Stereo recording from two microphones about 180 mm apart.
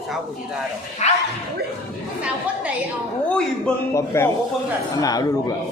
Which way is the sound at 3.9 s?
15° left (ahead or behind).